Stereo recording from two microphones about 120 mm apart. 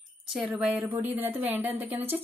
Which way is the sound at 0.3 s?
10° right (ahead or behind).